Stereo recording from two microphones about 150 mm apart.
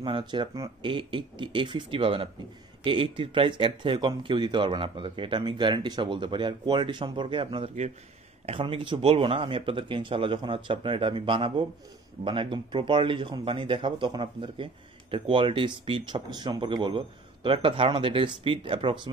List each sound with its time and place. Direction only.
0.0 s speech: 35° right (ahead or behind)